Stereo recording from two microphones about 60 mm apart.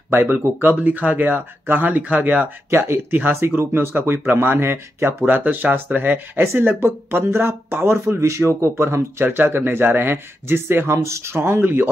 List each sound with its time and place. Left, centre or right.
0.1 s speech: right
2.7 s speech: right
5.2 s speech: right
9.2 s speech: right
11.0 s speech: right